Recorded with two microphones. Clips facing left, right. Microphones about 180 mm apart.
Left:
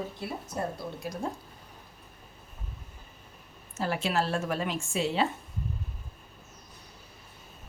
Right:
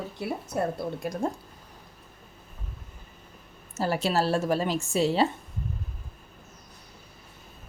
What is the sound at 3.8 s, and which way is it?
A woman's voice, 40° right (ahead or behind).